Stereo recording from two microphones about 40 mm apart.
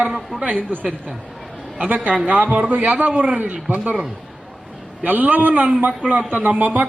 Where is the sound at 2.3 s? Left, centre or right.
Right.